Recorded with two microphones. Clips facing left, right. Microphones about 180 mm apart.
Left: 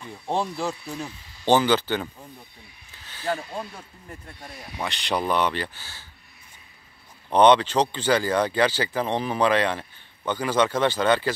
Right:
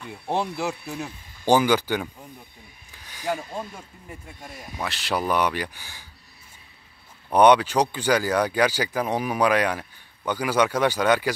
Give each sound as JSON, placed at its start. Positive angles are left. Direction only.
{"t": 0.1, "sound": "speech", "side_deg": -5}
{"t": 7.2, "sound": "speech", "side_deg": -10}